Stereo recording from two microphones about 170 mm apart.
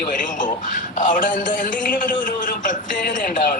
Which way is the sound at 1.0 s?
50° left (ahead or behind).